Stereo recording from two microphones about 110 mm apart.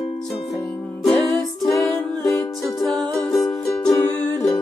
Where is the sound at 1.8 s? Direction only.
25° left (ahead or behind).